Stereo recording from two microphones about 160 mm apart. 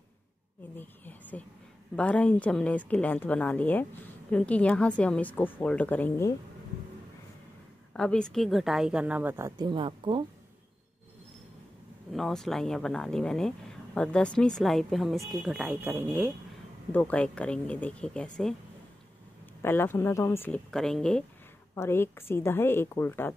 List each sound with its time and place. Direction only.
0.7 s a woman's voice: 10° left (ahead or behind)
7.9 s speech: 5° left (ahead or behind); by 9.5 s 15° right (ahead or behind)
9.6 s speech: 30° right (ahead or behind)
12.1 s speech: centre (ahead or behind); by 16.3 s 15° right (ahead or behind)
16.9 s a woman's voice: 10° left (ahead or behind)
19.6 s a woman's voice: 15° left (ahead or behind)
21.7 s a woman's voice: 15° left (ahead or behind)